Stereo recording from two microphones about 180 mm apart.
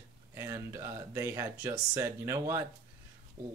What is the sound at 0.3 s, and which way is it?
Speech, 15° right (ahead or behind).